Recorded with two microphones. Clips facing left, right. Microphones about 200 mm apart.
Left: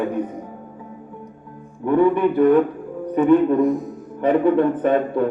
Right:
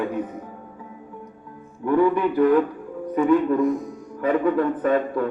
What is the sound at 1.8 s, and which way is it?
A man's voice, 20° left (ahead or behind).